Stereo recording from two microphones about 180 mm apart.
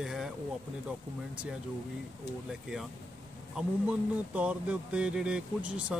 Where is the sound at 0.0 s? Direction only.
Centre (ahead or behind).